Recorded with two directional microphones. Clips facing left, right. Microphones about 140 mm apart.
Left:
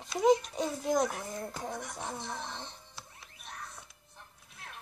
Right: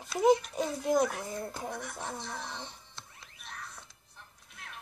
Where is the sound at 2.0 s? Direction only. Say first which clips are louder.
Even; centre (ahead or behind).